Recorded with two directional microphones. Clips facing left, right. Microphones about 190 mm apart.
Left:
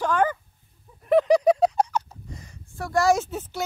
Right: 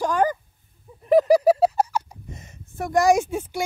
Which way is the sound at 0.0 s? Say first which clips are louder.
Right 1 dB; 40° right (ahead or behind).